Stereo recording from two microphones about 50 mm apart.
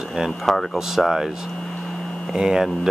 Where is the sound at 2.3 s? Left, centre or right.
Centre.